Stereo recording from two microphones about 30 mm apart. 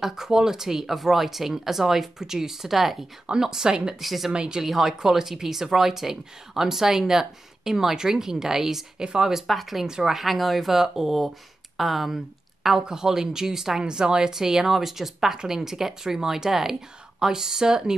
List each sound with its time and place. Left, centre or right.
0.0 s speech: centre
3.3 s speech: centre
4.0 s speech: centre
4.3 s speech: right
4.6 s speech: centre
8.9 s speech: right
9.5 s speech: centre
9.8 s speech: right
10.1 s speech: centre
10.7 s speech: centre
12.8 s speech: centre
13.8 s speech: right